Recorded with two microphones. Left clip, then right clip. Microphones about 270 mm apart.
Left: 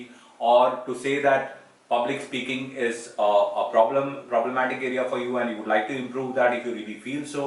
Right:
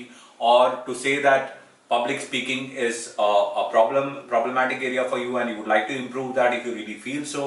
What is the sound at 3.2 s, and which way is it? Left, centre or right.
Speech, left.